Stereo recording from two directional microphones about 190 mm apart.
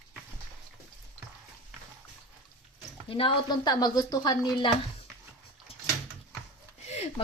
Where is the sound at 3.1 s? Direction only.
25° left (ahead or behind).